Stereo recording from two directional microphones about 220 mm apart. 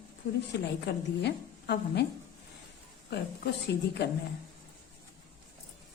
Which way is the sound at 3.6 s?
50° left (ahead or behind).